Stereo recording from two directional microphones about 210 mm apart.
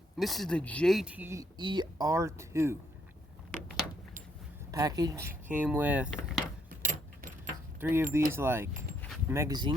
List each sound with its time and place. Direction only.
0.2 s speech: centre (ahead or behind)
4.7 s speech: 15° right (ahead or behind)
6.7 s keys jangling: 40° right (ahead or behind)
7.8 s speech: 10° right (ahead or behind)
9.0 s a sound: centre (ahead or behind)
9.3 s speech: 15° right (ahead or behind)